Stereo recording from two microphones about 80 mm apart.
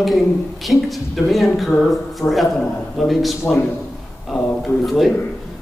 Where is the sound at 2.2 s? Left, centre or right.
Left.